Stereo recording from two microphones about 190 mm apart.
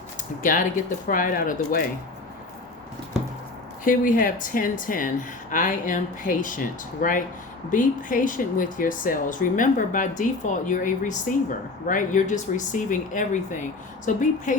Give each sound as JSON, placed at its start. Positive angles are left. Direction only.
{"t": 0.2, "sound": "speech", "side_deg": 45}
{"t": 3.8, "sound": "speech", "side_deg": 45}